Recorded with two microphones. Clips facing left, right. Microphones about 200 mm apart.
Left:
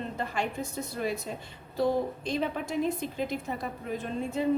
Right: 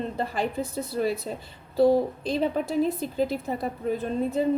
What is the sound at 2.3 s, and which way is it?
A woman's voice, 35° right (ahead or behind).